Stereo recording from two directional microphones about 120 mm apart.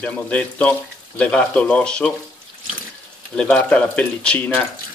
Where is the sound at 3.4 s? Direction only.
10° left (ahead or behind).